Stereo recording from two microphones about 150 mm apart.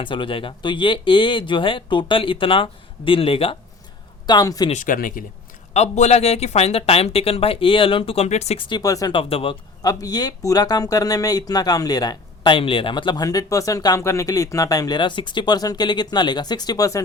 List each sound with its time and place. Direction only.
0.0 s speech: 35° left (ahead or behind)
4.3 s speech: 25° left (ahead or behind)
4.7 s speech: 60° left (ahead or behind)
5.7 s speech: 45° left (ahead or behind)
8.7 s speech: 25° left (ahead or behind)
9.8 s speech: 25° left (ahead or behind)